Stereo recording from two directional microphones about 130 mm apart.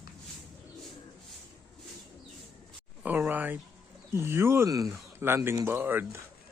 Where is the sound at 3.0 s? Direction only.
15° right (ahead or behind).